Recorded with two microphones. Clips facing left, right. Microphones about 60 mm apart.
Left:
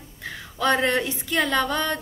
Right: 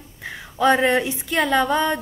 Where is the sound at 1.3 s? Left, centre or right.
Centre.